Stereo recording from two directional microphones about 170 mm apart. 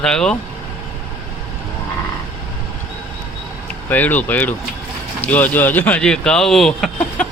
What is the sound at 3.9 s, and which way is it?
Speech, 10° left (ahead or behind).